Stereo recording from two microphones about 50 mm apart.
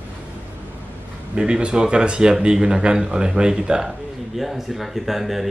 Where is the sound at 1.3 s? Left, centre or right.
Centre.